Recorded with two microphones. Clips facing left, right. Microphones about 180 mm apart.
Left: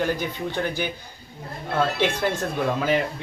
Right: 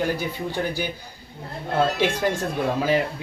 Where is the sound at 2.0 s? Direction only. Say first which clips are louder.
Right 1 dB; 10° right (ahead or behind).